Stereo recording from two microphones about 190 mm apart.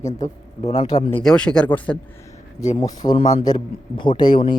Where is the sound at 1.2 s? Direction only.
5° left (ahead or behind).